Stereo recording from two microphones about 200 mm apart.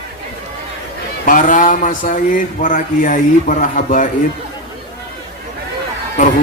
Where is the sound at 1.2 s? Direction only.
40° left (ahead or behind).